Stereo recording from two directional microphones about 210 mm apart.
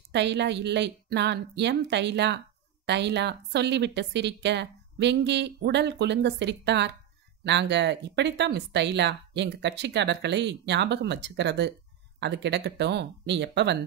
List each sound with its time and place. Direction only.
0.1 s speech: 55° right (ahead or behind)